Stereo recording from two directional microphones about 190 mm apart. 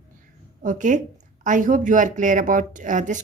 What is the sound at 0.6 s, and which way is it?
A woman's voice, 40° right (ahead or behind).